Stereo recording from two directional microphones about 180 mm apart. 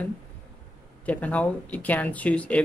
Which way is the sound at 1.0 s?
10° left (ahead or behind).